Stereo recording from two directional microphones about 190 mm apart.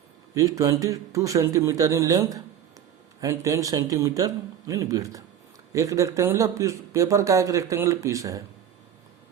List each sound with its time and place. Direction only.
0.3 s speech: 15° right (ahead or behind)